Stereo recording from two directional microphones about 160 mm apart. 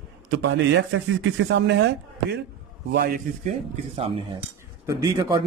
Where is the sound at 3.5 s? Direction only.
40° right (ahead or behind).